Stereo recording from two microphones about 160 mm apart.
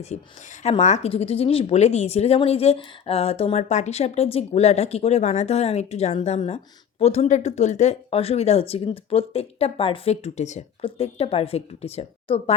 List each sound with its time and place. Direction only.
0.1 s speech: 45° left (ahead or behind)